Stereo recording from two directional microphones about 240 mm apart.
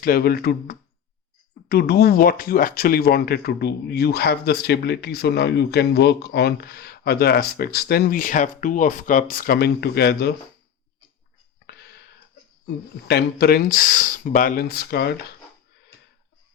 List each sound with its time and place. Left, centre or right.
0.0 s speech: left
12.6 s speech: left